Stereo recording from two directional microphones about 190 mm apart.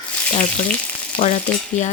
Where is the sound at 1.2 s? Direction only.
40° left (ahead or behind).